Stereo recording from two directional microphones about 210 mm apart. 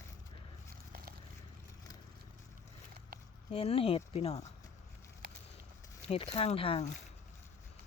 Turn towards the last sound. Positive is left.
turn(degrees=25)  # may be behind; listen again after turning